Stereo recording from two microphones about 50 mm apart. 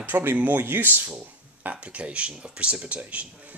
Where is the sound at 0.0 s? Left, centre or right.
Right.